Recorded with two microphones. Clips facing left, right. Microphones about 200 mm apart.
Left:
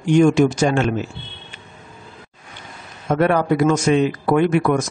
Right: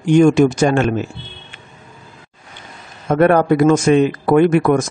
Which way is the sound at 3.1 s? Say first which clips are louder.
Right 4 dB; 50° right (ahead or behind).